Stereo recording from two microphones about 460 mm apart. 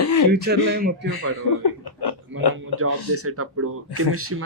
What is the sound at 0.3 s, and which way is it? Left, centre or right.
Speech, right.